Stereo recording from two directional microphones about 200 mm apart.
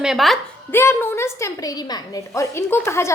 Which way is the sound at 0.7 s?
10° left (ahead or behind).